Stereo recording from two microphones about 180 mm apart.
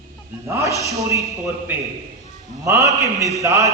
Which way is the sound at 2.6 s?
15° right (ahead or behind).